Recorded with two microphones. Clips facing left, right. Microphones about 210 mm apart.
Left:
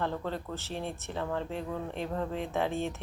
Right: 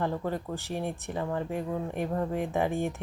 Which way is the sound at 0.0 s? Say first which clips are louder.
Right 3 dB; 15° right (ahead or behind).